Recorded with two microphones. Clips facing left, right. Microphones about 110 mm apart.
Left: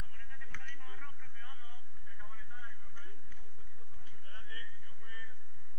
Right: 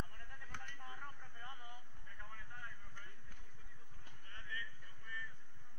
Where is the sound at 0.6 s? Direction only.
20° right (ahead or behind).